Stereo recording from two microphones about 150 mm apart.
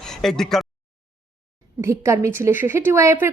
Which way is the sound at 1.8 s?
15° right (ahead or behind).